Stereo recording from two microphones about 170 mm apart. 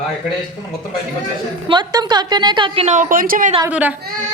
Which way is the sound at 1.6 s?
25° right (ahead or behind).